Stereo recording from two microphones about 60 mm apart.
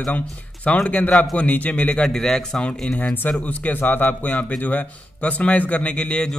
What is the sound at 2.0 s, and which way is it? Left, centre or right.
A man's voice, centre.